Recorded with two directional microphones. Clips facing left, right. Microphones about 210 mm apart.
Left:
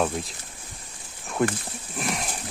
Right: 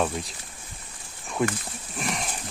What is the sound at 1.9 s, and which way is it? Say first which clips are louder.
Horse: left 1 dB; centre (ahead or behind).